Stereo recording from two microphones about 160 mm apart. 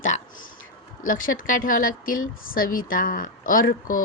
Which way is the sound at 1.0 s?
60° left (ahead or behind).